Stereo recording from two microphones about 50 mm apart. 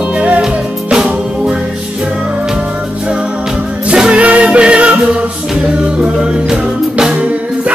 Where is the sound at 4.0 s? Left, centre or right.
Right.